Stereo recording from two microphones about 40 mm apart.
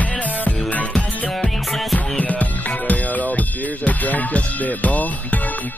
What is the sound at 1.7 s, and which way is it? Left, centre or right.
Music, centre.